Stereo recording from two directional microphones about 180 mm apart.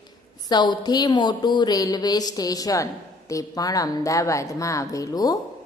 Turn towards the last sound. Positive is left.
turn(degrees=20)  # may be behind; listen again after turning